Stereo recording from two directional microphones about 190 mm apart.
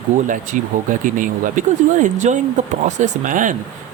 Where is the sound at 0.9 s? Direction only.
45° right (ahead or behind).